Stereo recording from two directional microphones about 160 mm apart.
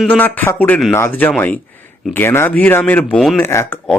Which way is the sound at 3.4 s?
15° left (ahead or behind).